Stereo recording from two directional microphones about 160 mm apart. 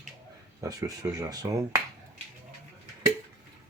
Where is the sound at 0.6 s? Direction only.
20° right (ahead or behind).